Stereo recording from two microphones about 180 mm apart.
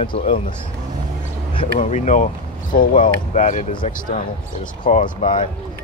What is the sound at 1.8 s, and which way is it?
Speech, 40° left (ahead or behind).